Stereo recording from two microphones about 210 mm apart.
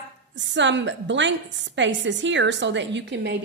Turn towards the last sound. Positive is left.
turn(degrees=-55)  # may be behind; listen again after turning